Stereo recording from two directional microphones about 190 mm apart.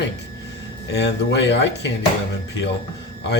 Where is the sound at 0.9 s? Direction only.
65° left (ahead or behind).